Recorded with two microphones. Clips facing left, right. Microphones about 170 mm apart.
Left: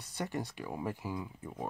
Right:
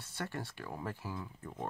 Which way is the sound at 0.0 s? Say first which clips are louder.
Left 4 dB; 15° left (ahead or behind).